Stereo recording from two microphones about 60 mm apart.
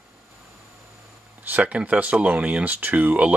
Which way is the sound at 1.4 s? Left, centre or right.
Right.